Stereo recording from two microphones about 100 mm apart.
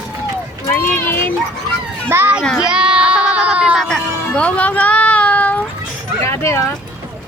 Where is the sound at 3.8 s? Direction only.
5° left (ahead or behind).